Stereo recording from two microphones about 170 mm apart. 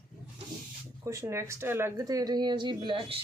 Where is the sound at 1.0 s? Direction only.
15° right (ahead or behind).